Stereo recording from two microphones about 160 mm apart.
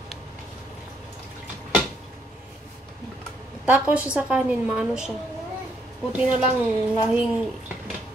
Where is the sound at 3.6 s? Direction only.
10° right (ahead or behind).